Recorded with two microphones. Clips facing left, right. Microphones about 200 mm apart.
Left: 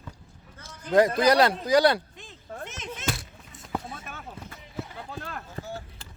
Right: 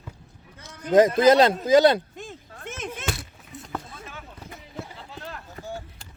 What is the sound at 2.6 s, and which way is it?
Whip, 50° right (ahead or behind).